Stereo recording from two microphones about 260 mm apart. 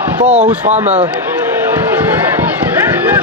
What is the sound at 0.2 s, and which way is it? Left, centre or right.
Speech, right.